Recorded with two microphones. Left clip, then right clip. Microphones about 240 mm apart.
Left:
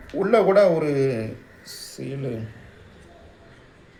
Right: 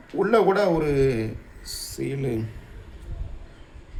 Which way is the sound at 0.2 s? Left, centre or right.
Right.